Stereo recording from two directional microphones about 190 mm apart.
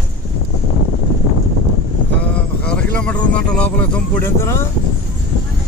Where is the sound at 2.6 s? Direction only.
5° left (ahead or behind).